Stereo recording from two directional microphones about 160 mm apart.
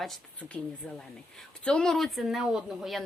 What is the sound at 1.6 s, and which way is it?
Speech, 5° left (ahead or behind).